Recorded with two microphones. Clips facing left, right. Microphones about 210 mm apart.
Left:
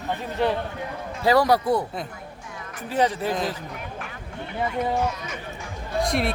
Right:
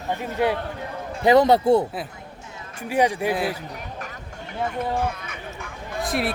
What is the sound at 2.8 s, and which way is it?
Speech, 10° right (ahead or behind).